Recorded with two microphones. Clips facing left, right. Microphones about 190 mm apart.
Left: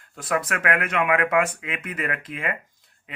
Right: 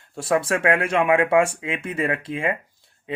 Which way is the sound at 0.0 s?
30° right (ahead or behind).